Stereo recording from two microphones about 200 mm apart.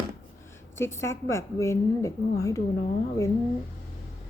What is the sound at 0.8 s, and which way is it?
A woman's voice, 15° left (ahead or behind).